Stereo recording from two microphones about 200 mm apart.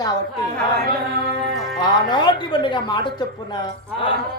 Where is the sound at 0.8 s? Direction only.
50° right (ahead or behind).